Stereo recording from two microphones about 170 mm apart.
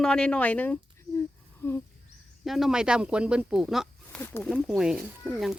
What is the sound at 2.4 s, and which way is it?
Speech, centre (ahead or behind).